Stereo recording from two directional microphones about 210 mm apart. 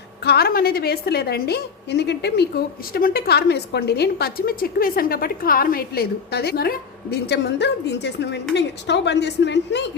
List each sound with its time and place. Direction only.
0.3 s a woman's voice: 45° left (ahead or behind)